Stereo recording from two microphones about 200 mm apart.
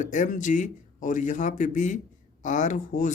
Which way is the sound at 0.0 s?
40° left (ahead or behind).